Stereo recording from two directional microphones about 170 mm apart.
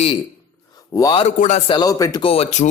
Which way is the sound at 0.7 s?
20° left (ahead or behind).